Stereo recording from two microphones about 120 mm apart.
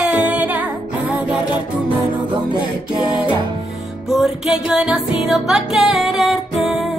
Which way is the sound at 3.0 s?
35° left (ahead or behind).